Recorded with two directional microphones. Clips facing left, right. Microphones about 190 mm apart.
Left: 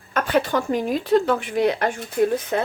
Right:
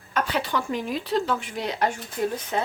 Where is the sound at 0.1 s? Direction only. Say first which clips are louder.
Left 5 dB; 50° left (ahead or behind).